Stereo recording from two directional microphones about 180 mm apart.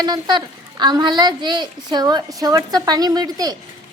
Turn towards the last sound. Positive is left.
turn(degrees=-20)  # may be behind; listen again after turning